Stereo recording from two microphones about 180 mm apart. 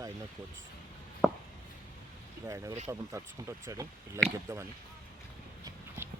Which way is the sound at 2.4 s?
15° right (ahead or behind).